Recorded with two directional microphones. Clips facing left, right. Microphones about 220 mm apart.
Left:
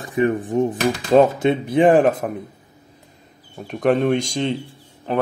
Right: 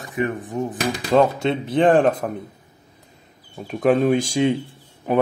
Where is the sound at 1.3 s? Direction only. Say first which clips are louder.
Left 3 dB; 15° left (ahead or behind).